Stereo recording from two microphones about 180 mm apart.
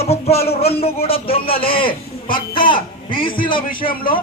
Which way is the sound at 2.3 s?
50° left (ahead or behind).